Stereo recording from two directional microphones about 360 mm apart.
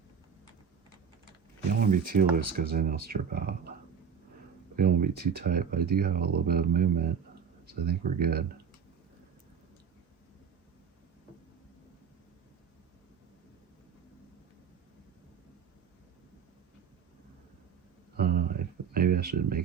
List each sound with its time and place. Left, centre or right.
1.8 s speech: right
4.8 s speech: right
18.2 s a sound: right